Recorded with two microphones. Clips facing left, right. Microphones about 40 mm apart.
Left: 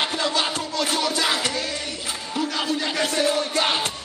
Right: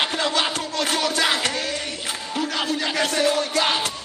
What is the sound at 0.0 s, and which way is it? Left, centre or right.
Music, right.